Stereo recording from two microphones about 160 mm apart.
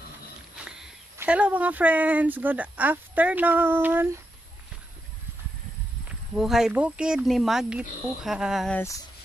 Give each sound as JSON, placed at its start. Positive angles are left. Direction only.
{"t": 0.7, "sound": "a sound", "side_deg": -5}
{"t": 1.1, "sound": "speech", "side_deg": -10}
{"t": 6.3, "sound": "speech", "side_deg": 0}
{"t": 8.7, "sound": "speech", "side_deg": 20}